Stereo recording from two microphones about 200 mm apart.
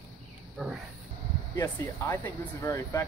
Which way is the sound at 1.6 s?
10° left (ahead or behind).